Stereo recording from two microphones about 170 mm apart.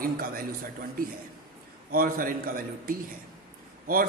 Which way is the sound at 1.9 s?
55° right (ahead or behind).